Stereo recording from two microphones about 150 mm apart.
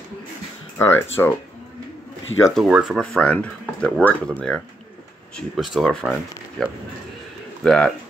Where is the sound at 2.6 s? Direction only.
5° right (ahead or behind).